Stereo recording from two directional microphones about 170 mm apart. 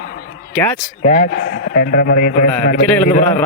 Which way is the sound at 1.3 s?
75° left (ahead or behind).